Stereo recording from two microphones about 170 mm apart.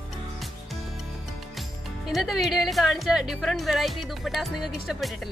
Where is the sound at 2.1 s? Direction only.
Centre (ahead or behind).